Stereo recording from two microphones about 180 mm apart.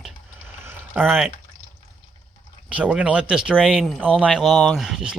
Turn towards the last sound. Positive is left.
turn(degrees=0)  # may be behind; listen again after turning